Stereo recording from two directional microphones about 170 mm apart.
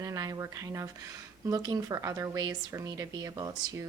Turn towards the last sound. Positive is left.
turn(degrees=-20)  # may be behind; listen again after turning